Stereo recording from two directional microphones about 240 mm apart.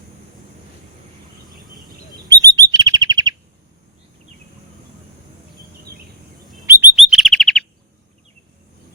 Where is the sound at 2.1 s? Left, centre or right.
Centre.